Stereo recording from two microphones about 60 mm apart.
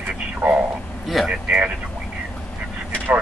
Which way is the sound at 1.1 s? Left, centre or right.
Centre.